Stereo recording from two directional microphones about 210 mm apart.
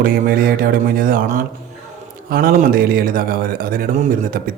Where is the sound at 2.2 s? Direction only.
45° right (ahead or behind).